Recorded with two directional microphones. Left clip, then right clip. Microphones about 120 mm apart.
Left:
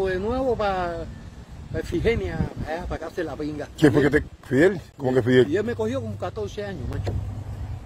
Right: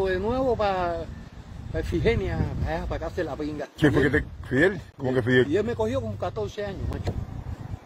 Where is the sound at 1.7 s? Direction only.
55° left (ahead or behind).